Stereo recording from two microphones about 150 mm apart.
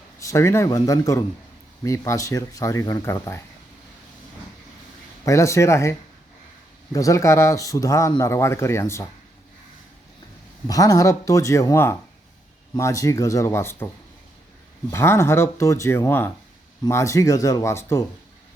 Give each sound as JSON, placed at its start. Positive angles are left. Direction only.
{"t": 0.2, "sound": "a man's voice", "side_deg": 20}
{"t": 5.2, "sound": "a man's voice", "side_deg": 20}
{"t": 10.7, "sound": "a man's voice", "side_deg": 25}